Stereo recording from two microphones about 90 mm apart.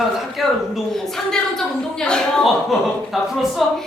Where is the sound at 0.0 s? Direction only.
Centre (ahead or behind).